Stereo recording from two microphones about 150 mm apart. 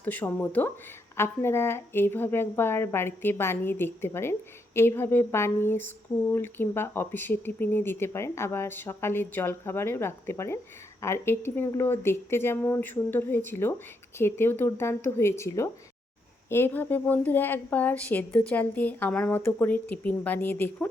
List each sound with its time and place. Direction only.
0.0 s a woman's voice: 10° left (ahead or behind)